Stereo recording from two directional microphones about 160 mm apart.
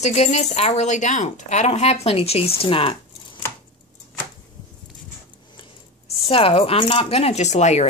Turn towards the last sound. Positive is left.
turn(degrees=45)  # may be behind; listen again after turning